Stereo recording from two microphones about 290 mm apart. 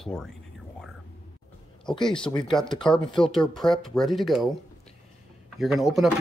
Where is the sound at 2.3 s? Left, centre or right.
Centre.